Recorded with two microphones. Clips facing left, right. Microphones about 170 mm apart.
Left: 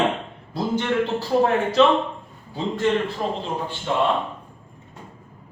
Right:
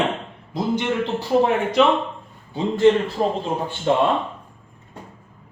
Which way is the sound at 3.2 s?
35° right (ahead or behind).